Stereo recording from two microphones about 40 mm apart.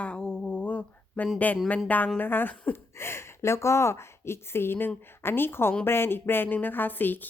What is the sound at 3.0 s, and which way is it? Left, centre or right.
A woman's voice, left.